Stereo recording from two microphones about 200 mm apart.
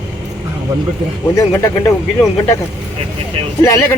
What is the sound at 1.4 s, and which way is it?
Speech, 15° left (ahead or behind).